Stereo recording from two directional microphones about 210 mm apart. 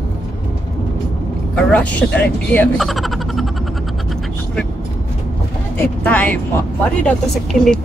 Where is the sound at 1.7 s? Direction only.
5° left (ahead or behind).